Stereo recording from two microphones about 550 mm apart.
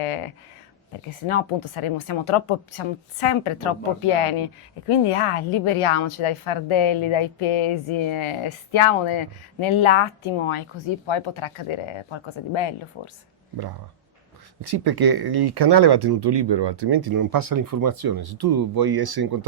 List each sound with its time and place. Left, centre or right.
0.0 s speech: left
1.3 s speech: left
14.6 s speech: right